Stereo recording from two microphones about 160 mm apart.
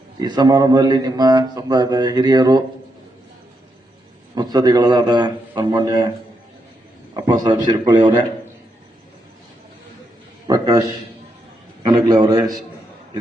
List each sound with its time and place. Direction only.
0.2 s speech: 25° right (ahead or behind)
4.4 s speech: 25° right (ahead or behind)
7.1 s a man's voice: 25° right (ahead or behind)
10.4 s a man's voice: 25° right (ahead or behind)